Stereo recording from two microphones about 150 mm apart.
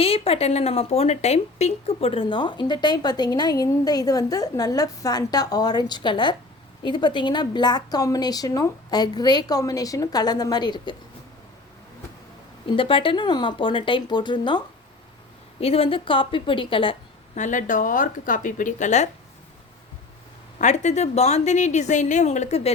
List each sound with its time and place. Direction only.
0.0 s speech: 40° left (ahead or behind)
12.7 s speech: 35° left (ahead or behind)
15.6 s speech: 40° left (ahead or behind)
17.3 s speech: 55° left (ahead or behind)
20.6 s a woman's voice: 50° left (ahead or behind)